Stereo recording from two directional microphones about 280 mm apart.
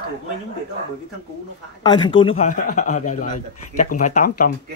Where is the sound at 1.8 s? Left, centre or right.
Centre.